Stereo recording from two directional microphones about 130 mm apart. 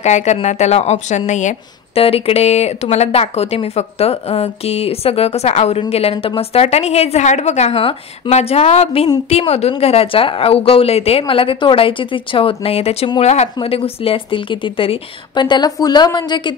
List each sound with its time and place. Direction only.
0.0 s a woman's voice: 60° left (ahead or behind)
2.0 s a woman's voice: 50° left (ahead or behind)
13.6 s speech: 45° left (ahead or behind)